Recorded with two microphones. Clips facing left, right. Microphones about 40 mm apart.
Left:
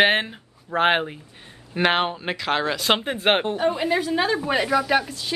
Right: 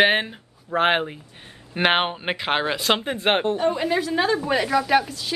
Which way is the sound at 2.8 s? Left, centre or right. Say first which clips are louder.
Left 3 dB; centre.